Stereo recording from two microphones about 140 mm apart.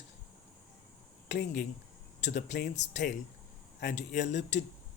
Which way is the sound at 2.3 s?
90° left.